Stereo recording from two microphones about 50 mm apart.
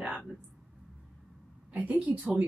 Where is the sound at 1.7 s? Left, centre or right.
Right.